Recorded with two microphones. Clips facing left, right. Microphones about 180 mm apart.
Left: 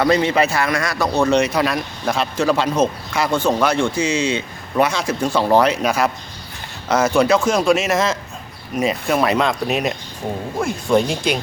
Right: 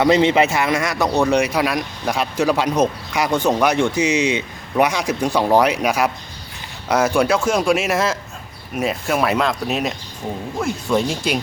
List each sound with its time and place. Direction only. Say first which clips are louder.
0.0 s speech: right 2 dB; 20° right (ahead or behind); by 9.9 s centre (ahead or behind)
10.9 s speech: left 3 dB; 5° right (ahead or behind)